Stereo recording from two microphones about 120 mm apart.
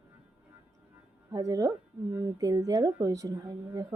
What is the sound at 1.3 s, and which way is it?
Speech, 30° right (ahead or behind).